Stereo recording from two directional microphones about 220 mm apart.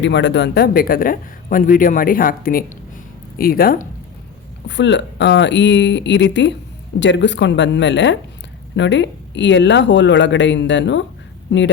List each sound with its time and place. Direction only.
0.0 s a man's voice: 55° left (ahead or behind)
4.7 s speech: 55° left (ahead or behind)